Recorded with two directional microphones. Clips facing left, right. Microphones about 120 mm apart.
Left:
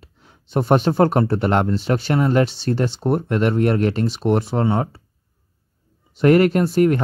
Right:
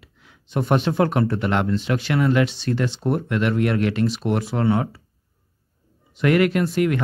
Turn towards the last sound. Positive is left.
turn(degrees=35)  # may be behind; listen again after turning